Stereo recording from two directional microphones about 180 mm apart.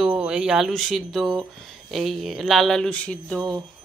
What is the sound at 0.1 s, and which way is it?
Speech, 5° right (ahead or behind).